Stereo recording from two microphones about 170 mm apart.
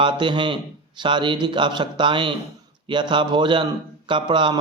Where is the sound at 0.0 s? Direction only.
25° right (ahead or behind).